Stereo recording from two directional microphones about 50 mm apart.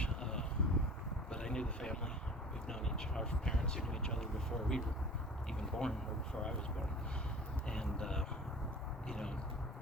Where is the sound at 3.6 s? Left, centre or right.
Centre.